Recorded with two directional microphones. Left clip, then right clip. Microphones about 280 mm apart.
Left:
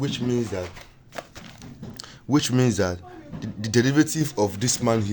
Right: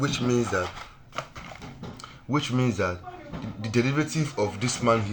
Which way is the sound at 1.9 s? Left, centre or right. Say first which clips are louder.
Left 5 dB; left.